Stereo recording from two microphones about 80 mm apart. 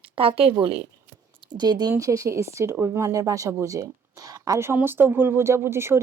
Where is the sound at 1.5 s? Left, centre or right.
Right.